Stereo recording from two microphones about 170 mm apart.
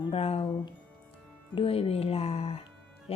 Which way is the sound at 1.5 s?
35° left (ahead or behind).